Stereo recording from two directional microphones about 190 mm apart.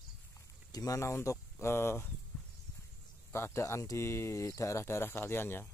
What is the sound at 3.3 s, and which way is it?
Speech, 15° left (ahead or behind).